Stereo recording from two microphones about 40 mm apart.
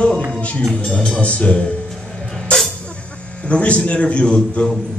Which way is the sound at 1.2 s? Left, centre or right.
Left.